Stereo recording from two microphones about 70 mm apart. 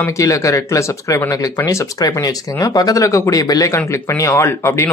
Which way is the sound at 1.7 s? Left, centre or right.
Left.